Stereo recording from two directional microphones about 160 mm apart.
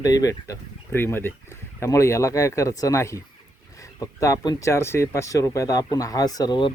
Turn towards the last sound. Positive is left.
turn(degrees=30)  # may be behind; listen again after turning